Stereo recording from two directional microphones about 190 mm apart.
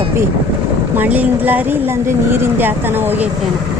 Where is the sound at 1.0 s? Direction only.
10° right (ahead or behind).